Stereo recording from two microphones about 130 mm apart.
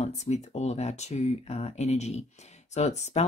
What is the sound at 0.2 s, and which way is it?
Speech, 60° left (ahead or behind).